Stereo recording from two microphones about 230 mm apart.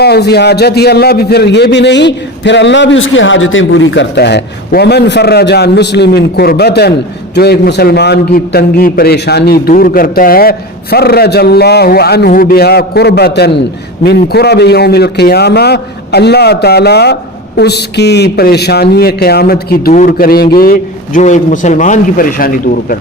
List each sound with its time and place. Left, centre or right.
0.0 s a man's voice: left